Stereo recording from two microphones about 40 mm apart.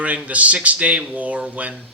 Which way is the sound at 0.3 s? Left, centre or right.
Right.